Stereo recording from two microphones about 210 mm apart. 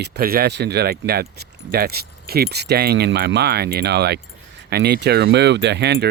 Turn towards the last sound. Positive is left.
turn(degrees=-55)  # may be behind; listen again after turning